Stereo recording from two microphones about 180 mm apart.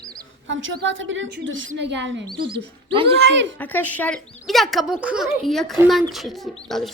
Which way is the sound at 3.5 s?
10° left (ahead or behind).